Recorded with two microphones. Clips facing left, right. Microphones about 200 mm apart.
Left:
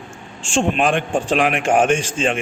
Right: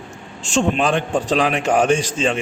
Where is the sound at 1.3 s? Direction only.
40° right (ahead or behind).